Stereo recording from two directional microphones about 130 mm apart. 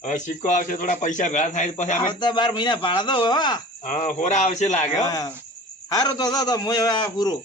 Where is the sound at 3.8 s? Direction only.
75° left (ahead or behind).